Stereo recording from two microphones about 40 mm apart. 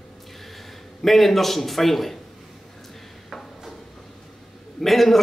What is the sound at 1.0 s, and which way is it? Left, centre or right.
A man's voice, centre.